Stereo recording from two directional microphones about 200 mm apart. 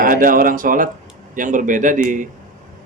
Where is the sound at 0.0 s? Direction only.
45° right (ahead or behind).